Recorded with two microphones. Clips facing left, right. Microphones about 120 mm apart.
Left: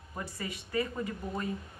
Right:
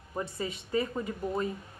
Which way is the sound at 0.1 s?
25° right (ahead or behind).